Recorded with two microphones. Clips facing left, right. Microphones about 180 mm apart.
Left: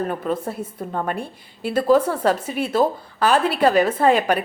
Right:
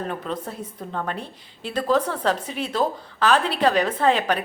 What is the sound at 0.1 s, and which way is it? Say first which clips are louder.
A woman's voice: left 5 dB; 10° left (ahead or behind).